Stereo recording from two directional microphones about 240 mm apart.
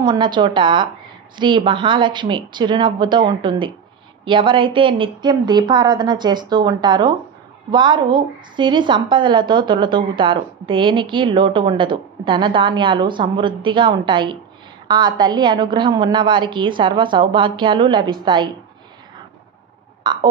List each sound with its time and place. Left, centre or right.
0.0 s a woman's voice: centre